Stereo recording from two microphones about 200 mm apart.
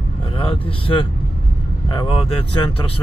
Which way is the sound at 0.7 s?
25° left (ahead or behind).